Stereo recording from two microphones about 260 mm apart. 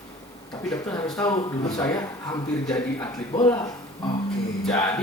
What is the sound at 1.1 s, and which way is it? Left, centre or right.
Speech, centre.